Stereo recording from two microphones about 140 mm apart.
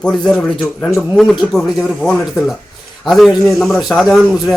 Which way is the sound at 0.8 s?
20° left (ahead or behind).